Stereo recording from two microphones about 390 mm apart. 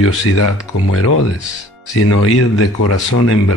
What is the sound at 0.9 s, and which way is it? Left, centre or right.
Speech, left.